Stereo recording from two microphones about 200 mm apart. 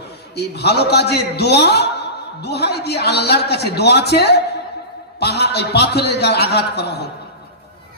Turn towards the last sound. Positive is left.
turn(degrees=55)  # may be behind; listen again after turning